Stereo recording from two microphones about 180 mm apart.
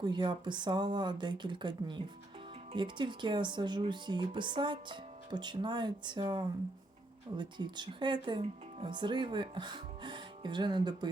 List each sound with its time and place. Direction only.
0.0 s a woman's voice: 25° right (ahead or behind)